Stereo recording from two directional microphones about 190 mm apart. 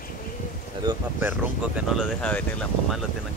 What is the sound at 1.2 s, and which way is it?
Speech, 10° right (ahead or behind).